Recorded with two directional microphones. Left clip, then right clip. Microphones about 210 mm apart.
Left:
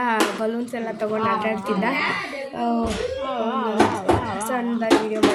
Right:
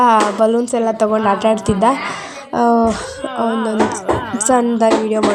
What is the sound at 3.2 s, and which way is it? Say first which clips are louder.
Speech: right 8 dB; 20° right (ahead or behind).